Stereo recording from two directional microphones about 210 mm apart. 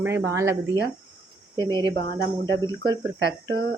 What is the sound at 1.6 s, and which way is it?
Speech, 20° right (ahead or behind).